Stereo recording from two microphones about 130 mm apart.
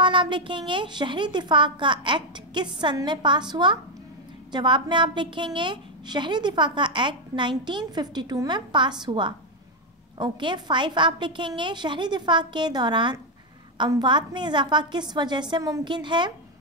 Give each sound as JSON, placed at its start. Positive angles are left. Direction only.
{"t": 0.0, "sound": "a woman's voice", "side_deg": -40}